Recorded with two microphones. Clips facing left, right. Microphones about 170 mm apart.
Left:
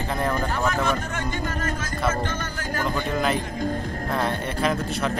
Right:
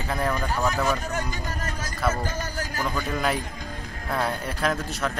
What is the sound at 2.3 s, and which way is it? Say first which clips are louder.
Speech: even; 40° right (ahead or behind).